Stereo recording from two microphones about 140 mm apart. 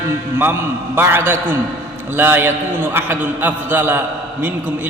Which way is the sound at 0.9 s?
15° right (ahead or behind).